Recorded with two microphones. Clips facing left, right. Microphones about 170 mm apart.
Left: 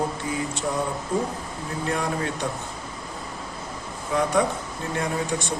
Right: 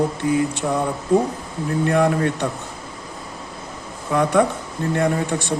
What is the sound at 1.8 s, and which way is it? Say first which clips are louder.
Speech: right 9 dB; 60° right (ahead or behind).